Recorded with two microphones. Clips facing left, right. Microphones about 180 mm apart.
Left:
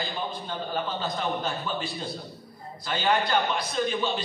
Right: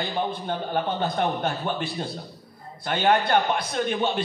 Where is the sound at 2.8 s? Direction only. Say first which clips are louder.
Right 4 dB; 55° right (ahead or behind).